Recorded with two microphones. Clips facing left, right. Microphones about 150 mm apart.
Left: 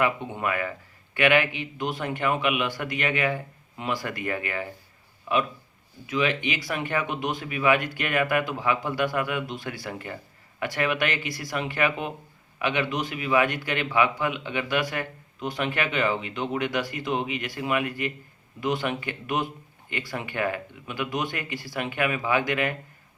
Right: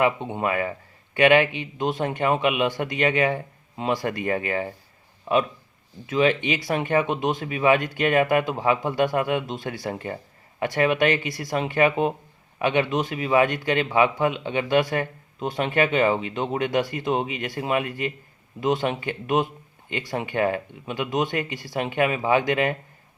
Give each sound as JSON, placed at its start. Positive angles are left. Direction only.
{"t": 0.0, "sound": "a man's voice", "side_deg": -25}
{"t": 6.1, "sound": "a man's voice", "side_deg": -30}